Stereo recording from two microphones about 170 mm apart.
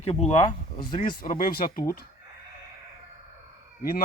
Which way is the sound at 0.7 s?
25° left (ahead or behind).